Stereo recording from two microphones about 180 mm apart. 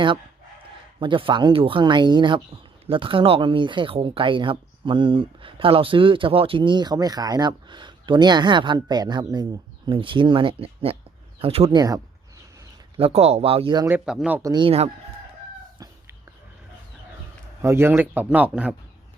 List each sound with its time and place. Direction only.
0.9 s speech: 30° right (ahead or behind)
13.0 s speech: 35° right (ahead or behind)
13.9 s a man's voice: 5° right (ahead or behind)
14.5 s speech: 30° right (ahead or behind)
17.6 s a man's voice: 15° right (ahead or behind)